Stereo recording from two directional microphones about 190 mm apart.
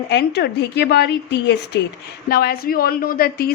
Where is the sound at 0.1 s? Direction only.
60° left (ahead or behind).